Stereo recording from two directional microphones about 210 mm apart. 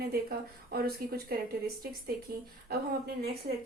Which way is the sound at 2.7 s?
50° right (ahead or behind).